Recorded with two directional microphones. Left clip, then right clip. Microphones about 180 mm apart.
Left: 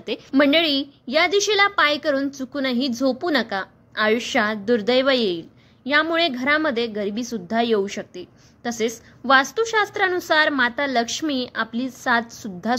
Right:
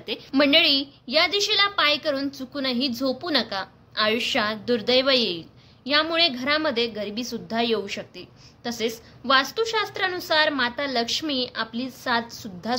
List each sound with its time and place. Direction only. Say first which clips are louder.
0.3 s a woman's voice: left 1 dB; 30° left (ahead or behind)